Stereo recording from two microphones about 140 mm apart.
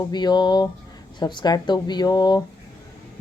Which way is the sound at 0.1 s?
30° left (ahead or behind).